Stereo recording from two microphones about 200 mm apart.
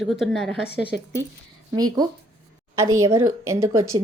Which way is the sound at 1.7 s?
20° right (ahead or behind).